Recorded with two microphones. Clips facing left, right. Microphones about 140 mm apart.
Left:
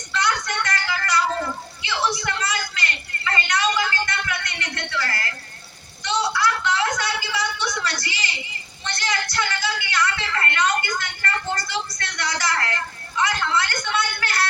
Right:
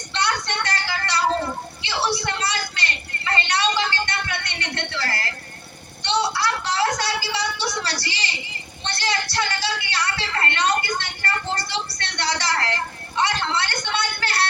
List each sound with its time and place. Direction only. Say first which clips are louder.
0.1 s music: left 1 dB; 30° right (ahead or behind)
1.8 s a sound: even; 30° right (ahead or behind)
8.8 s music: right 1 dB; 30° right (ahead or behind)